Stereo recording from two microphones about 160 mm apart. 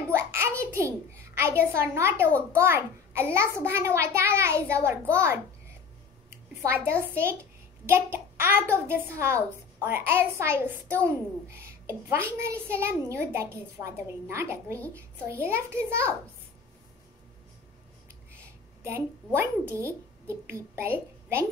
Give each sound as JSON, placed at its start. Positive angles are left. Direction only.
{"t": 0.1, "sound": "a sound", "side_deg": -15}
{"t": 0.6, "sound": "a child's voice", "side_deg": -15}
{"t": 18.9, "sound": "a child's voice", "side_deg": -15}